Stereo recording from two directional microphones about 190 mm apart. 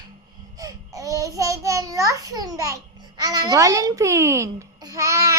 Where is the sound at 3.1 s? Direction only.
20° right (ahead or behind).